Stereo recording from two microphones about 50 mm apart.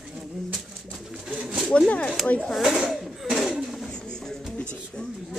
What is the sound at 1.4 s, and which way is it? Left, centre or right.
Pigeon, centre.